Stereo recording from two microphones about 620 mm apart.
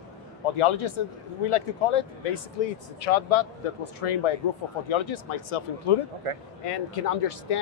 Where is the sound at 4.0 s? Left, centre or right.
Left.